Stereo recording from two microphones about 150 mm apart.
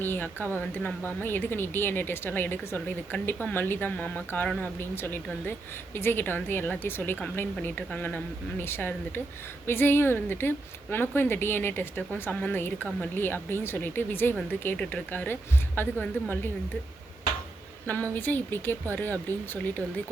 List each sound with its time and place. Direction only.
0.0 s speech: 15° left (ahead or behind)
18.1 s speech: 15° left (ahead or behind)